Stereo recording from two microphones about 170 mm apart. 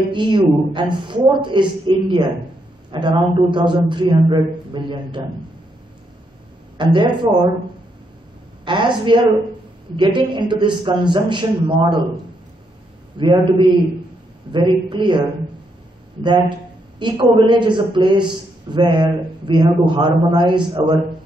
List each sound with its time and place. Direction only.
0.1 s a man's voice: 30° right (ahead or behind)
6.8 s speech: 25° right (ahead or behind)
8.6 s a man's voice: 30° right (ahead or behind)
13.2 s a man's voice: 30° right (ahead or behind)
16.2 s a man's voice: 25° right (ahead or behind)